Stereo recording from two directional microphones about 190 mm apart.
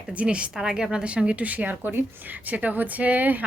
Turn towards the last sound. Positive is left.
turn(degrees=-10)  # may be behind; listen again after turning